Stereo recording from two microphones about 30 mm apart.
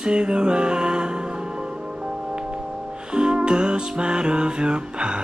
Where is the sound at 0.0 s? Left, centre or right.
Right.